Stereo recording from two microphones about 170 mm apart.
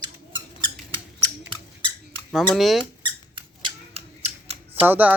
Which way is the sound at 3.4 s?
35° right (ahead or behind).